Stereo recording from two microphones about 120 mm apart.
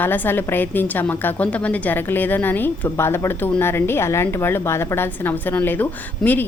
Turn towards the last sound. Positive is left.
turn(degrees=15)  # may be behind; listen again after turning